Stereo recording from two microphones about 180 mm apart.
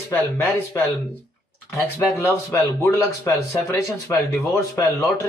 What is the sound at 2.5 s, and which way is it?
A man's voice, 15° left (ahead or behind).